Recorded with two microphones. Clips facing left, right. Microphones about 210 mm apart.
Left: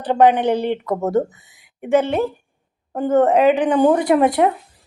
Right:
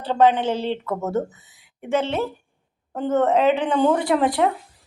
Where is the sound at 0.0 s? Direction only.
15° left (ahead or behind).